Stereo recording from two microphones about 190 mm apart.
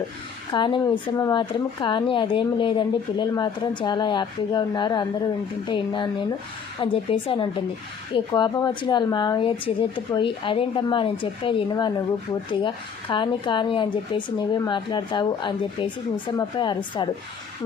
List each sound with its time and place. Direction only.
0.5 s speech: 25° left (ahead or behind)